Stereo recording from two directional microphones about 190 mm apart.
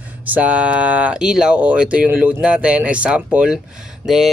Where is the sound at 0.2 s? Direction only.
10° right (ahead or behind).